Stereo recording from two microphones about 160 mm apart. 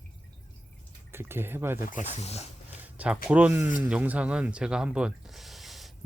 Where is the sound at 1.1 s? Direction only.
15° right (ahead or behind).